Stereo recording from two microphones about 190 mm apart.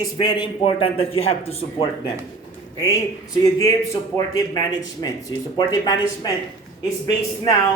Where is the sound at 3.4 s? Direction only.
15° left (ahead or behind).